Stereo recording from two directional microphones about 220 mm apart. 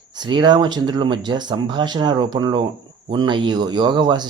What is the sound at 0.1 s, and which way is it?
Speech, 20° right (ahead or behind).